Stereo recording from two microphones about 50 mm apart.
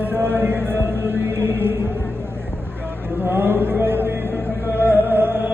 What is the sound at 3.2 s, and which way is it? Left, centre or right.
Music, right.